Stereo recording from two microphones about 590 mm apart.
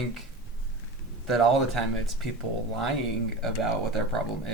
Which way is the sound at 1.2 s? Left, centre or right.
Left.